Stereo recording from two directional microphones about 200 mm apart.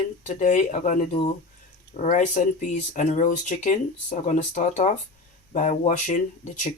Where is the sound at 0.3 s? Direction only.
40° left (ahead or behind).